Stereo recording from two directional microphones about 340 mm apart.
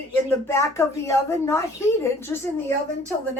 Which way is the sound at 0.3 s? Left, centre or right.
Centre.